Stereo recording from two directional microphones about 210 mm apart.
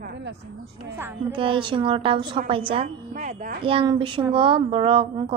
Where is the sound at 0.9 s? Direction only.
10° right (ahead or behind).